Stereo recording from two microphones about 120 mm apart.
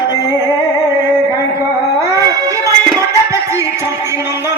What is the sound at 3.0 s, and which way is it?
Music, 25° right (ahead or behind).